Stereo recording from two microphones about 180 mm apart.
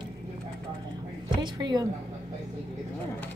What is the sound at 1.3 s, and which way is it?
Speech, 25° right (ahead or behind).